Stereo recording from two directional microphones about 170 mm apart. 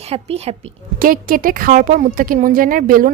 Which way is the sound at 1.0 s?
55° right (ahead or behind).